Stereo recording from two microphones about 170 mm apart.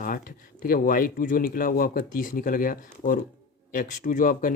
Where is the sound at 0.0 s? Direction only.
55° left (ahead or behind).